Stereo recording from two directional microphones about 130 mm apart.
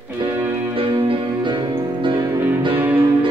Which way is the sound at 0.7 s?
40° right (ahead or behind).